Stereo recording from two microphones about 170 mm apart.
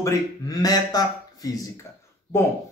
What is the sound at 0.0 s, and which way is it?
Speech, 20° left (ahead or behind).